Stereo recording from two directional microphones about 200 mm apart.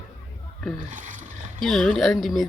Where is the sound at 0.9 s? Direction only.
40° right (ahead or behind).